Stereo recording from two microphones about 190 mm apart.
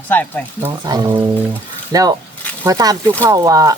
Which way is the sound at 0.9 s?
20° right (ahead or behind).